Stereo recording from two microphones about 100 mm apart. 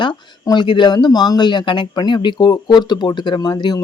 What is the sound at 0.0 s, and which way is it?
Speech, 50° left (ahead or behind).